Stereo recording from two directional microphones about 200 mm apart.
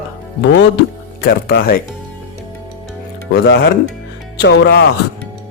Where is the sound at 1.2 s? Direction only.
50° left (ahead or behind).